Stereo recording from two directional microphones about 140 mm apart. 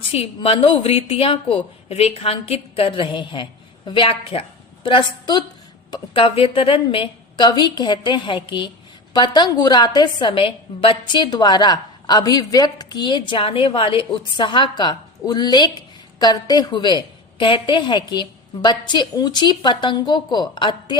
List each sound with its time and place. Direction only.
0.1 s a woman's voice: 45° left (ahead or behind)